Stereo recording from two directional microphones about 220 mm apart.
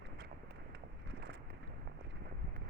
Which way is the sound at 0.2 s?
50° right (ahead or behind).